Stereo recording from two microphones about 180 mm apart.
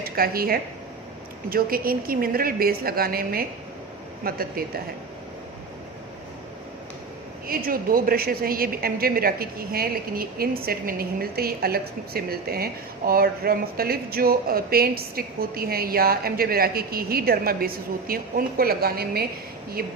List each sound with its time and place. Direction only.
0.0 s a woman's voice: 55° right (ahead or behind)
7.4 s a woman's voice: 55° right (ahead or behind)